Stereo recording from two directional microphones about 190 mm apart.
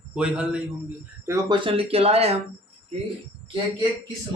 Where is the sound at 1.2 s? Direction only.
20° right (ahead or behind).